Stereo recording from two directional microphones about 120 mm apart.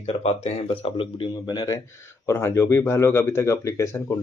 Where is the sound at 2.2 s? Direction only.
20° left (ahead or behind).